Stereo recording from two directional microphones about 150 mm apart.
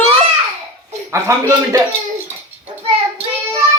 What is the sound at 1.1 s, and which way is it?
Speech, 20° right (ahead or behind).